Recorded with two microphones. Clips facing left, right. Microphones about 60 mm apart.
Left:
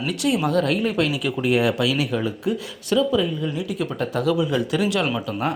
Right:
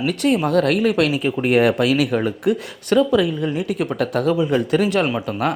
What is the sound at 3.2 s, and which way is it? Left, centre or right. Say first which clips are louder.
Speech: right 4 dB; right.